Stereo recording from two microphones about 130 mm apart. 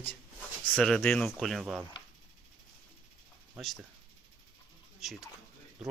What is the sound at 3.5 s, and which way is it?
Speech, centre (ahead or behind).